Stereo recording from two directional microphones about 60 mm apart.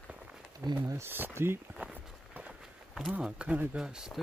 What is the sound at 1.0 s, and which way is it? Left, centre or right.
Speech, right.